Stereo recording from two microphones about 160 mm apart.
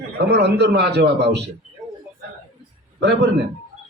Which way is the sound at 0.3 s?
90° right.